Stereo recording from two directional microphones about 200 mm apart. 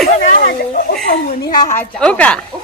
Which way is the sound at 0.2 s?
45° left (ahead or behind).